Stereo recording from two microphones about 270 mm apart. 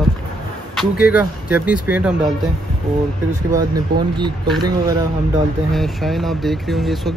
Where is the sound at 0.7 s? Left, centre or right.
Centre.